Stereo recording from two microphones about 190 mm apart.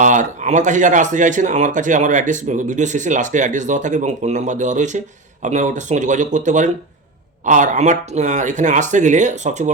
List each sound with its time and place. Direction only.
0.0 s speech: 40° right (ahead or behind)